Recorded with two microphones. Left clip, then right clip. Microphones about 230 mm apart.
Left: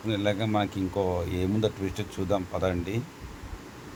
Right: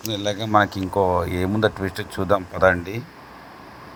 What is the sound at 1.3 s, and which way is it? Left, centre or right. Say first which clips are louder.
Speech: right 7 dB; right.